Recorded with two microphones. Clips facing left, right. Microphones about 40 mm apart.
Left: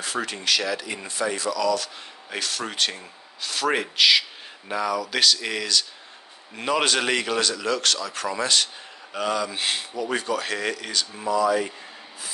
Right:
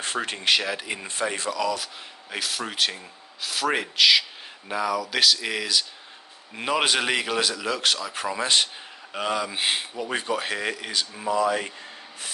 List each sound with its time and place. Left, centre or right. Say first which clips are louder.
0.0 s speech: right 1 dB; right
1.8 s speech: left 2 dB; centre
11.2 s speech: left 2 dB; right